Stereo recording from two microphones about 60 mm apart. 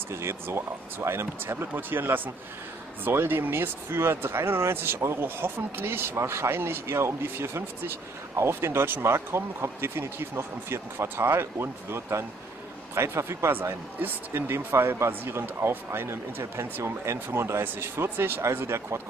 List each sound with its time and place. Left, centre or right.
0.1 s speech: right
1.7 s speech: right